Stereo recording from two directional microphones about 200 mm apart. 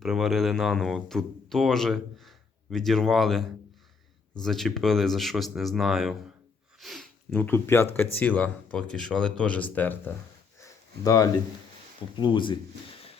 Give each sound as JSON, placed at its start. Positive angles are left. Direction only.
{"t": 0.0, "sound": "a man's voice", "side_deg": 0}
{"t": 6.7, "sound": "sniff", "side_deg": 0}
{"t": 7.3, "sound": "speech", "side_deg": 10}
{"t": 10.6, "sound": "a sound", "side_deg": 15}
{"t": 12.1, "sound": "speech", "side_deg": 25}